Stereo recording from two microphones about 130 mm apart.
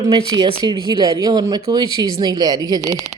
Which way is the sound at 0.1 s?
35° right (ahead or behind).